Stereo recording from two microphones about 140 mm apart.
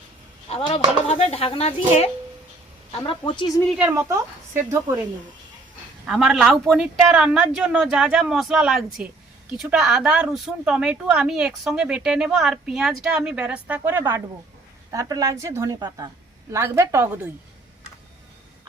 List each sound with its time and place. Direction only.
0.4 s speech: 45° left (ahead or behind)
3.1 s a woman's voice: 35° left (ahead or behind)
3.8 s a woman's voice: 15° right (ahead or behind)
6.1 s a woman's voice: 5° right (ahead or behind); by 17.1 s 20° right (ahead or behind)